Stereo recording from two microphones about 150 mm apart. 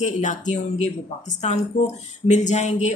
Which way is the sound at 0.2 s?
55° left (ahead or behind).